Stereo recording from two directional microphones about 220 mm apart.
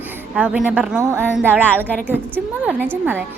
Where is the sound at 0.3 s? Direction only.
5° right (ahead or behind).